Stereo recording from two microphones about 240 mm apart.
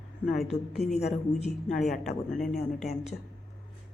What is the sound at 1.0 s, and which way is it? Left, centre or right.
Speech, left.